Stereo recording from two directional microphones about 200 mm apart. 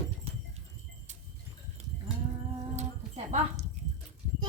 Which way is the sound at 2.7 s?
35° right (ahead or behind).